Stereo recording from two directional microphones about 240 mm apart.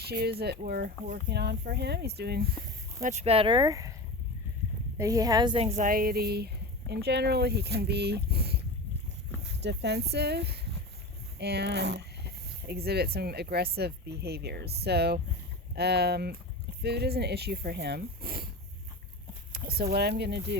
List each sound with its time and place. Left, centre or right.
0.0 s speech: right
3.0 s speech: right
4.9 s speech: centre; by 18.4 s right
19.5 s speech: right